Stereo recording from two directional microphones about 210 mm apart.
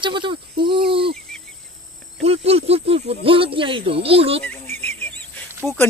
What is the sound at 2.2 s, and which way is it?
Speech, 30° right (ahead or behind).